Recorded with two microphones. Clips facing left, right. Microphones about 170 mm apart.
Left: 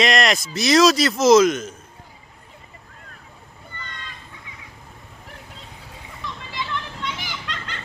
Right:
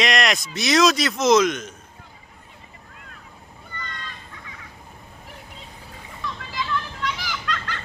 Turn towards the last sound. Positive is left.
turn(degrees=25)  # may be behind; listen again after turning